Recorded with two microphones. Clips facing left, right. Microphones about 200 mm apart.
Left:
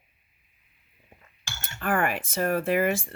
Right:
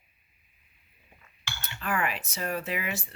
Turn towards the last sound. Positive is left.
turn(degrees=50)  # may be behind; listen again after turning